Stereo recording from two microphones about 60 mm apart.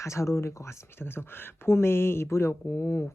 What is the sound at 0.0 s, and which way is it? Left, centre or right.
Speech, left.